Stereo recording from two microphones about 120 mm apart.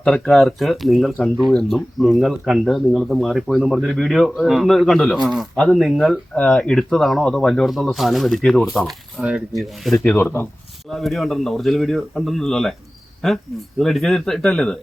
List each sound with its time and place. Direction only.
0.0 s speech: centre (ahead or behind)
10.2 s speech: 20° left (ahead or behind)
10.8 s speech: centre (ahead or behind)